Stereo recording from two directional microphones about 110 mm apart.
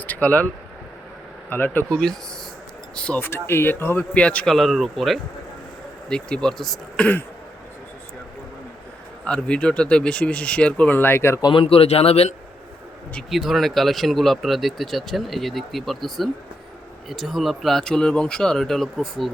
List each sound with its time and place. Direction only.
0.0 s speech: 15° left (ahead or behind)
1.9 s speech: 5° left (ahead or behind)
3.2 s speech: 20° left (ahead or behind)
9.2 s speech: 10° left (ahead or behind)
11.4 s a man's voice: 55° left (ahead or behind)
13.3 s speech: centre (ahead or behind)